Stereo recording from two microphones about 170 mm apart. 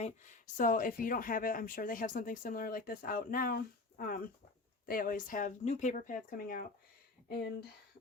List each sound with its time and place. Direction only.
0.0 s speech: 50° left (ahead or behind)